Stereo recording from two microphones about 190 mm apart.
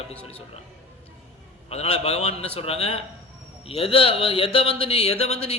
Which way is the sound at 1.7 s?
30° left (ahead or behind).